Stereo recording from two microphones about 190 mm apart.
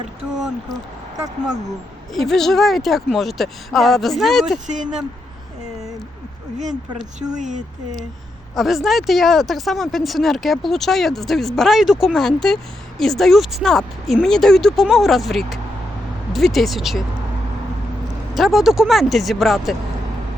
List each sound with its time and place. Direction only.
0.7 s speech: 20° right (ahead or behind)
2.1 s speech: centre (ahead or behind)
4.6 s speech: 40° right (ahead or behind)
7.3 s speech: 40° right (ahead or behind)
8.5 s speech: centre (ahead or behind)
18.3 s speech: centre (ahead or behind)